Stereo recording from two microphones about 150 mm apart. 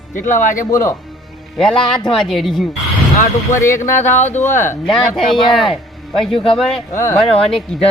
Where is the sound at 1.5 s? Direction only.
5° left (ahead or behind).